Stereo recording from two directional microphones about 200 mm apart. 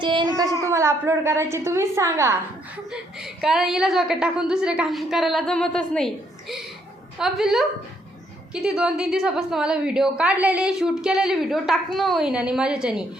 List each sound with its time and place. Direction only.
0.0 s a child's voice: 25° right (ahead or behind)
2.9 s a woman's voice: 5° right (ahead or behind)
7.2 s a woman's voice: centre (ahead or behind)